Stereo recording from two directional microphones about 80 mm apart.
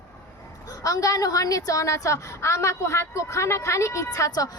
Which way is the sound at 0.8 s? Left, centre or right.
Left.